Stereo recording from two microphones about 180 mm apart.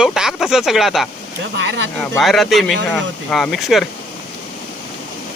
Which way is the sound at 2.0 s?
Centre (ahead or behind).